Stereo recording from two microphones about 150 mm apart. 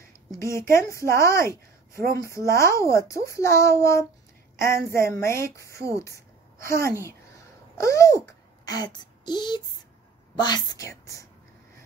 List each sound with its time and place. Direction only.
0.4 s a woman's voice: 20° left (ahead or behind)
7.7 s a sound: 20° left (ahead or behind)
10.3 s a child's voice: 30° left (ahead or behind)